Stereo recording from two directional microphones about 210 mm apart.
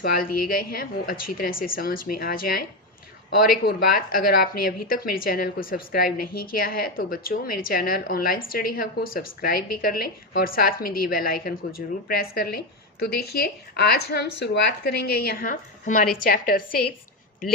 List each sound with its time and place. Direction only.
0.0 s a woman's voice: 45° left (ahead or behind)